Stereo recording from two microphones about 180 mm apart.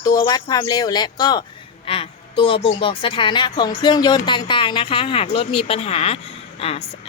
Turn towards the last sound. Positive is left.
turn(degrees=35)  # may be behind; listen again after turning